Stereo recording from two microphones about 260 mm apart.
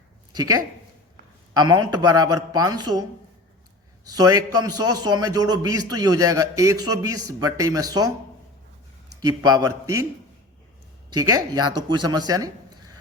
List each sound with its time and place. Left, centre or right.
0.3 s speech: centre
4.1 s speech: centre
9.2 s speech: centre
11.1 s speech: centre